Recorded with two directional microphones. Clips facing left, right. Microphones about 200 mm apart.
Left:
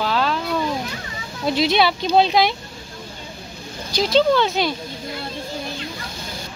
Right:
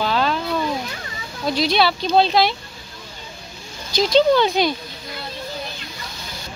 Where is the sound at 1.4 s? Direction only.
20° left (ahead or behind).